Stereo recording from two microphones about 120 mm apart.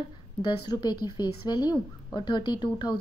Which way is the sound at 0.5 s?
40° left (ahead or behind).